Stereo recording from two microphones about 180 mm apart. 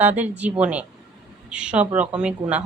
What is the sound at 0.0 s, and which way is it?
Speech, 10° right (ahead or behind).